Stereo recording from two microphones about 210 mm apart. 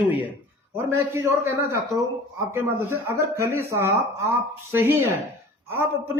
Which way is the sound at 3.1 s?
10° right (ahead or behind).